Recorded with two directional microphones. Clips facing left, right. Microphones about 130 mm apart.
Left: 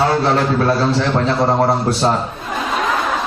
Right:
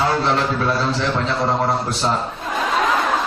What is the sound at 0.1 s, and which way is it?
A man's voice, 40° left (ahead or behind).